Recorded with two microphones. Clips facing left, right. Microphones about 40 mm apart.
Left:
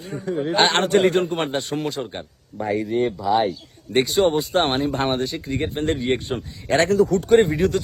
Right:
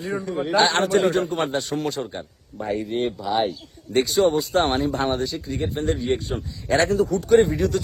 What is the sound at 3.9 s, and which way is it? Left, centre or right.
Speech, left.